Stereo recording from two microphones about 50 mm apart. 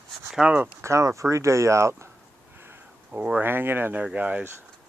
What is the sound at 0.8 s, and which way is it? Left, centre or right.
Speech, right.